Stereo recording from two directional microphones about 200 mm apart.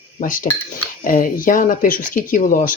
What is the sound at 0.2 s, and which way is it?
Speech, 45° left (ahead or behind).